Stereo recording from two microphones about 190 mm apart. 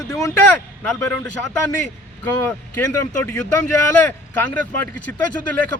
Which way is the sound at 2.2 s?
10° left (ahead or behind).